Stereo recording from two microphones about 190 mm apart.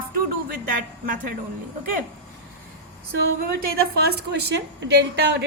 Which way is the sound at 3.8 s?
55° right (ahead or behind).